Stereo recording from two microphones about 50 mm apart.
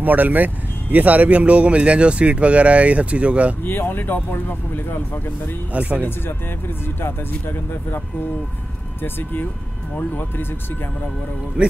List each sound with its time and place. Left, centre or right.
0.0 s speech: right
3.6 s speech: left
5.7 s speech: right
7.0 s speech: left
9.0 s speech: left